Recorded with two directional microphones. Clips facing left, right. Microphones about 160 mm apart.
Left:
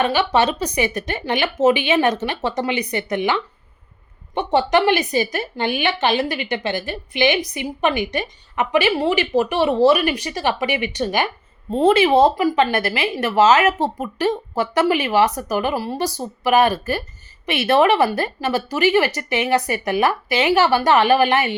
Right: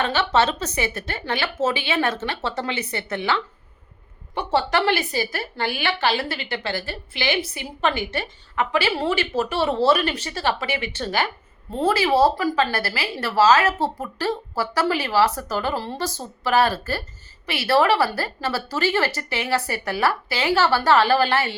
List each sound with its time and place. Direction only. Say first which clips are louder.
0.0 s a woman's voice: left 3 dB; 15° left (ahead or behind)